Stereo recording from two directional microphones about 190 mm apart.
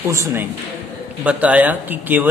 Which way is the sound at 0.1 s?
15° right (ahead or behind).